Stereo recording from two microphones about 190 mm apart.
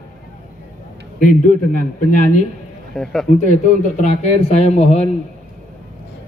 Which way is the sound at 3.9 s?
35° left (ahead or behind).